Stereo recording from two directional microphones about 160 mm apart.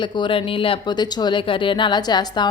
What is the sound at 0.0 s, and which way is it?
A woman's voice, 30° left (ahead or behind).